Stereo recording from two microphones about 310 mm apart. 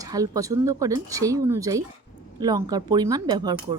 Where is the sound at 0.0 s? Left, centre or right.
Centre.